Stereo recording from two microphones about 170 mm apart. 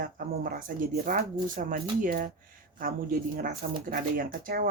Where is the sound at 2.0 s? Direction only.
50° right (ahead or behind).